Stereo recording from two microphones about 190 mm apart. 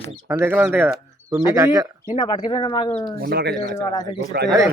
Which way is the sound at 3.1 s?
50° right (ahead or behind).